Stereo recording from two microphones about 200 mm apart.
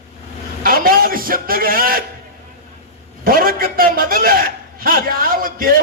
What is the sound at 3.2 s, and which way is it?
A man's voice, 45° right (ahead or behind).